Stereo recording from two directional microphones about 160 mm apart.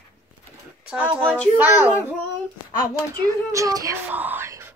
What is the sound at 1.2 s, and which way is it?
Speech, 10° left (ahead or behind).